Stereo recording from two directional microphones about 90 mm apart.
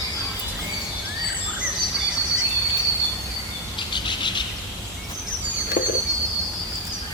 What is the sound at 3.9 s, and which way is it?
Bird, 60° left (ahead or behind).